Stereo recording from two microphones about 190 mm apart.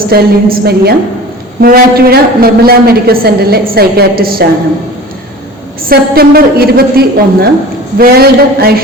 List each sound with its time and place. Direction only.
0.1 s a woman's voice: 55° right (ahead or behind)
5.9 s a woman's voice: 55° right (ahead or behind)